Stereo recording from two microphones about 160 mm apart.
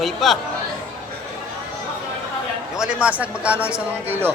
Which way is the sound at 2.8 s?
5° right (ahead or behind).